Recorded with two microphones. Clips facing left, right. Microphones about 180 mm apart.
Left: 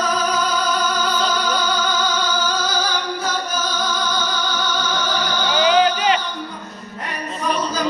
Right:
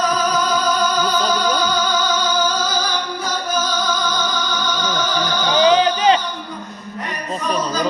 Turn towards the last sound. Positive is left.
turn(degrees=-30)  # may be behind; listen again after turning